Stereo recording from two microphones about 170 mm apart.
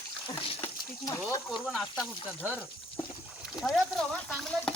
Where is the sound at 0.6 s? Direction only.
20° left (ahead or behind).